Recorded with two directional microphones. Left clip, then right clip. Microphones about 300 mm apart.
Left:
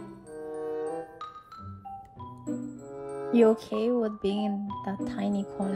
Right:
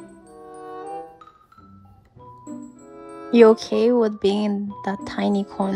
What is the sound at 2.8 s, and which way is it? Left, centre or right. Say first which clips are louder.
Music: left 2 dB; centre.